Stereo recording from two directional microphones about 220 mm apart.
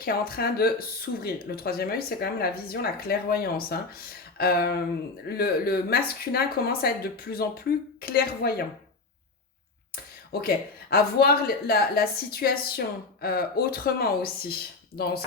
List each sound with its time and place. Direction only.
0.0 s speech: 45° left (ahead or behind)
10.4 s speech: 45° left (ahead or behind)